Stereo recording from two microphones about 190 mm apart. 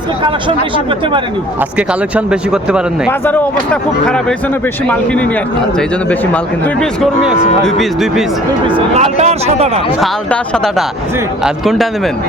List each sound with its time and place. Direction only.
0.2 s speech: 25° right (ahead or behind)
1.9 s speech: 5° right (ahead or behind)
3.1 s speech: 10° left (ahead or behind)
8.6 s speech: 25° right (ahead or behind)
10.0 s speech: 5° left (ahead or behind)